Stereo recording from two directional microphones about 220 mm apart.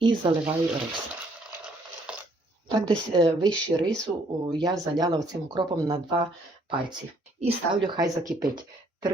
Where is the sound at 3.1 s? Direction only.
20° right (ahead or behind).